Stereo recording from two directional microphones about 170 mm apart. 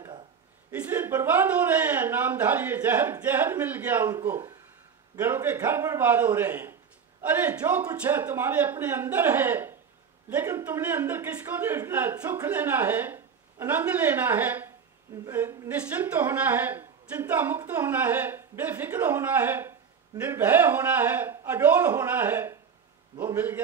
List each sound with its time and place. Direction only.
0.7 s speech: 10° right (ahead or behind)